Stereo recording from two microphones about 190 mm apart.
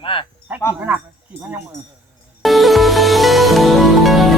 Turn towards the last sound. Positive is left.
turn(degrees=0)  # may be behind; listen again after turning